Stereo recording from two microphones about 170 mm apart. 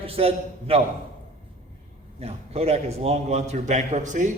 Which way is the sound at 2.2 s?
35° right (ahead or behind).